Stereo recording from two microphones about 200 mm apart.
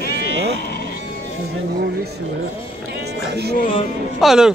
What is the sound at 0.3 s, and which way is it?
Sheep, 60° right (ahead or behind).